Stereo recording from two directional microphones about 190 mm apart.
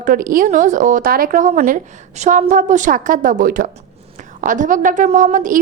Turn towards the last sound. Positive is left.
turn(degrees=-40)  # may be behind; listen again after turning